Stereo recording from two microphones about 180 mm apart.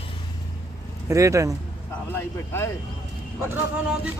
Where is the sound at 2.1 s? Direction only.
15° left (ahead or behind).